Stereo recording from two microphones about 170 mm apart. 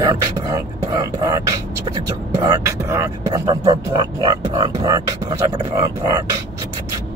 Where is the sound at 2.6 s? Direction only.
15° right (ahead or behind).